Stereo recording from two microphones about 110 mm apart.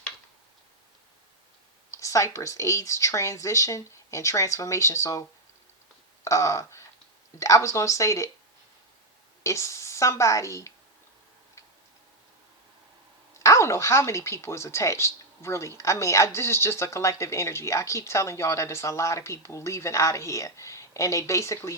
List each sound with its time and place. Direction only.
1.9 s speech: 30° left (ahead or behind)
6.2 s a sound: 30° left (ahead or behind)
7.3 s speech: 30° left (ahead or behind)
9.4 s a woman's voice: 25° left (ahead or behind)
13.4 s speech: 25° left (ahead or behind)